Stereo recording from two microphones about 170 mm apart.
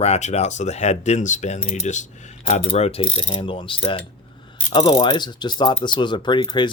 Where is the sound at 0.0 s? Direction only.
40° left (ahead or behind).